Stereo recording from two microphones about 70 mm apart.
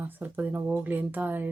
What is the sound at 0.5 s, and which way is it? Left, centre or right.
Speech, right.